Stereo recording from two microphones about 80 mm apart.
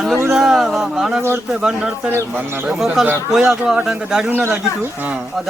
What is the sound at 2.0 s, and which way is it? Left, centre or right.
Speech, right.